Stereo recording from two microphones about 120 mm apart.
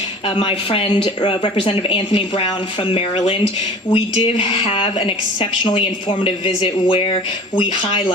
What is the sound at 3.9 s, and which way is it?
A woman's voice, 55° left (ahead or behind).